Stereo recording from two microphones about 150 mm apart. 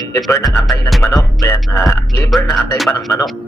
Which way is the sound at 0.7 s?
Centre (ahead or behind).